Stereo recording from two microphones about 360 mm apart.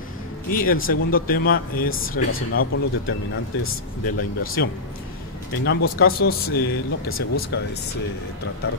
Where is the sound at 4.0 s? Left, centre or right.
Left.